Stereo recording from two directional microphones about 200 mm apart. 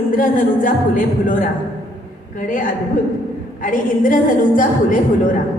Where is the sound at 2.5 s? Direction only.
40° left (ahead or behind).